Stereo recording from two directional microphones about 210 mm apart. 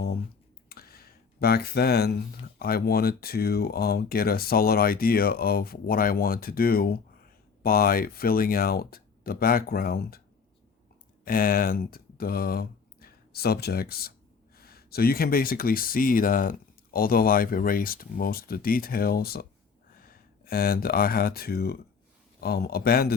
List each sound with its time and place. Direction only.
0.7 s a sound: 45° left (ahead or behind)
2.6 s speech: 45° left (ahead or behind)
11.3 s speech: 45° left (ahead or behind)